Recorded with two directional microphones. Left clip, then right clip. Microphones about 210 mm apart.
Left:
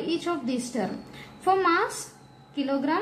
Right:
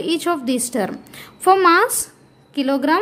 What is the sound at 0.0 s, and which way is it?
A woman's voice, 50° right (ahead or behind).